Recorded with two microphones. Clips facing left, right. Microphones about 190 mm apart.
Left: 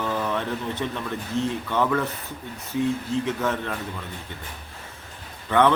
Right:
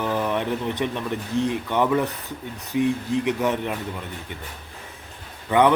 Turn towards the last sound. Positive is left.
turn(degrees=-15)  # may be behind; listen again after turning